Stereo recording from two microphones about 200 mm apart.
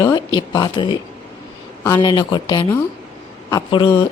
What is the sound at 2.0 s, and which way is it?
A woman's voice, 20° left (ahead or behind).